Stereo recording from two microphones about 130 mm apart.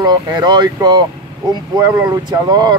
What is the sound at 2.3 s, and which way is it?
Speech, 30° right (ahead or behind).